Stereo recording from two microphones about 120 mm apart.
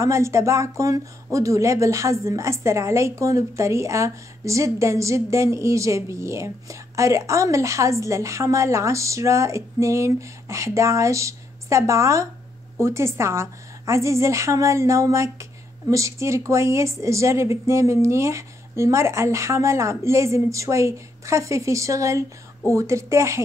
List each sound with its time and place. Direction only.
0.0 s speech: 25° right (ahead or behind)